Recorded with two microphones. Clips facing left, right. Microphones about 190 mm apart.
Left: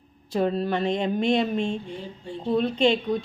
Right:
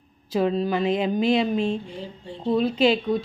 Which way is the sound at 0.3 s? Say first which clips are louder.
Right 2 dB; centre (ahead or behind).